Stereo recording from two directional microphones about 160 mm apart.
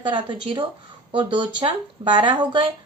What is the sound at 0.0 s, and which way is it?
Speech, 30° right (ahead or behind).